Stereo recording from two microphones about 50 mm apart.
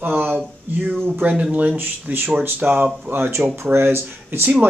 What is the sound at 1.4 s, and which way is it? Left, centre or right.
Speech, right.